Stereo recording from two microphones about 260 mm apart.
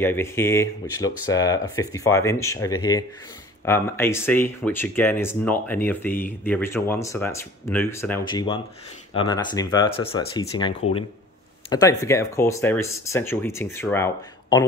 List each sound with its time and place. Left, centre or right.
0.0 s speech: centre
11.7 s speech: centre